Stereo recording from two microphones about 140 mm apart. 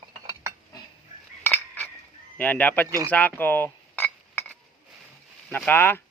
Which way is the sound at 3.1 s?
10° left (ahead or behind).